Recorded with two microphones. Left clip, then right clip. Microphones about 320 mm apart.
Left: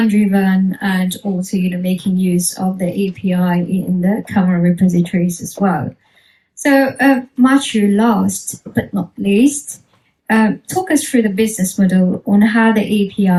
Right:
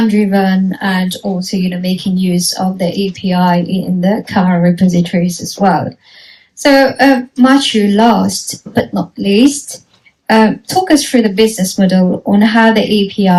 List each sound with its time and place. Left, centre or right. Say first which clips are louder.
0.1 s speech: right 4 dB; right